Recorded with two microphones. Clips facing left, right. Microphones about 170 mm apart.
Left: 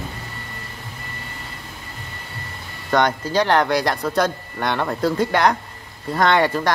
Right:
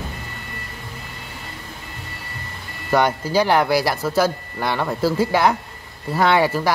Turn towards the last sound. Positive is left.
turn(degrees=-5)  # may be behind; listen again after turning